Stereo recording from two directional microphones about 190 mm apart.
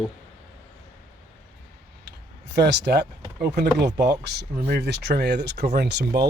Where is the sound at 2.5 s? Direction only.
60° right (ahead or behind).